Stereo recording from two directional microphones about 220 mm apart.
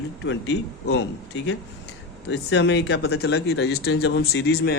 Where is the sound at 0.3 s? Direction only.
55° left (ahead or behind).